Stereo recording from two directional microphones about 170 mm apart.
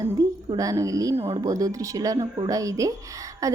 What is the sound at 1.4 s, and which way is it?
A woman's voice, 20° right (ahead or behind).